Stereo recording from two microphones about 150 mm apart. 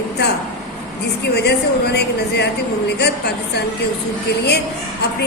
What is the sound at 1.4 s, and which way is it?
A woman's voice, 90° left.